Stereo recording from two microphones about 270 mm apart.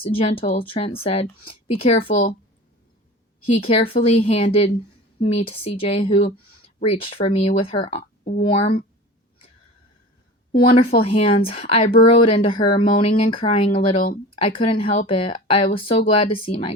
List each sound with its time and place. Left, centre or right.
0.0 s speech: left
3.9 s speech: left
10.5 s speech: left